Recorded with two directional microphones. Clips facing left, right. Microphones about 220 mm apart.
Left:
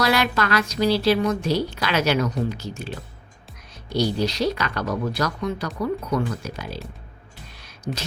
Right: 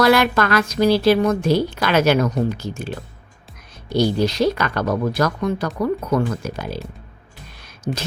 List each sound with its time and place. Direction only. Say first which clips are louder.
0.0 s a woman's voice: right 6 dB; 50° right (ahead or behind)
3.9 s a woman's voice: right 4 dB; 50° right (ahead or behind)